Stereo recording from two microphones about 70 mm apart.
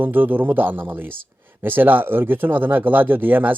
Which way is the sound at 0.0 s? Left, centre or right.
Right.